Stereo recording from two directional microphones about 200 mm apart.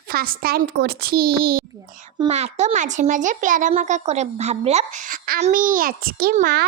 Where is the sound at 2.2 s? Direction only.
30° right (ahead or behind); by 6.6 s 50° right (ahead or behind).